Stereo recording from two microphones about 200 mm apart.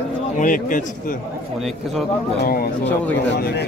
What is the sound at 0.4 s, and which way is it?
Speech, 40° left (ahead or behind).